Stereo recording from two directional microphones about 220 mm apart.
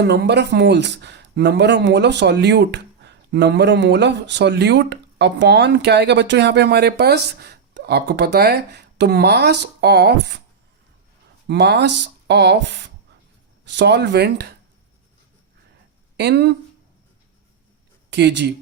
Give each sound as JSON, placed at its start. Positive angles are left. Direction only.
{"t": 0.0, "sound": "speech", "side_deg": -50}
{"t": 11.4, "sound": "speech", "side_deg": -50}
{"t": 16.1, "sound": "speech", "side_deg": -50}
{"t": 18.1, "sound": "speech", "side_deg": -50}